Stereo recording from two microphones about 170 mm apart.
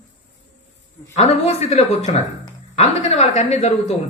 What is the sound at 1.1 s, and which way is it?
Speech, 40° left (ahead or behind).